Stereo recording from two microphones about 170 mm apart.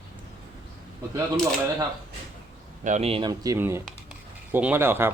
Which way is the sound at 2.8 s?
40° right (ahead or behind).